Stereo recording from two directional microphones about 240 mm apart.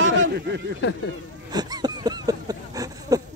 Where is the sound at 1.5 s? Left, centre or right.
Centre.